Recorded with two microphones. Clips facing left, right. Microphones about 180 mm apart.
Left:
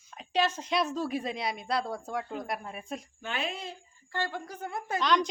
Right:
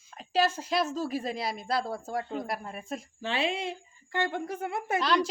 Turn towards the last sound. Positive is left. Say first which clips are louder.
# even
turn(degrees=-5)  # may be behind; listen again after turning